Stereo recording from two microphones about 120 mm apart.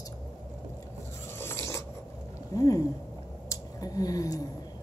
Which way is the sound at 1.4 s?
20° left (ahead or behind).